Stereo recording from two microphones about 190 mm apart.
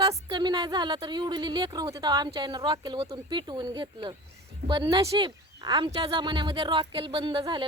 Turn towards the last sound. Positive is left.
turn(degrees=-25)  # may be behind; listen again after turning